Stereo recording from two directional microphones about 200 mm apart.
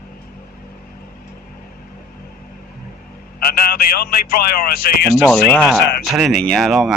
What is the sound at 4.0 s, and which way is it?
Speech, 50° left (ahead or behind).